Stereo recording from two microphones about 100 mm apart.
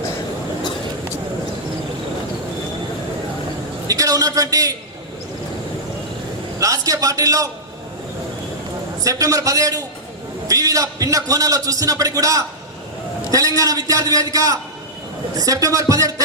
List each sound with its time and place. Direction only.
3.8 s a man's voice: 35° right (ahead or behind)
6.6 s a man's voice: 35° right (ahead or behind)
9.0 s a man's voice: 35° right (ahead or behind)